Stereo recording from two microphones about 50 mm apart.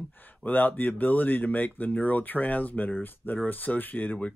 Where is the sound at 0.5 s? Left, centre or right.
Left.